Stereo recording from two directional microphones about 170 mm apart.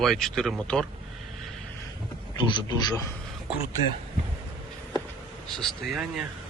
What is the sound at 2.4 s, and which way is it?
Speech, 25° left (ahead or behind).